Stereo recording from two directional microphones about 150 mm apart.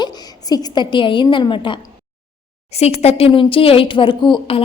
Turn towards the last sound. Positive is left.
turn(degrees=35)  # may be behind; listen again after turning